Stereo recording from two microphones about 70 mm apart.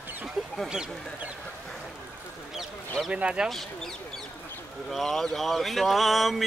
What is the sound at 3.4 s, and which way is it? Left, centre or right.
Speech, centre.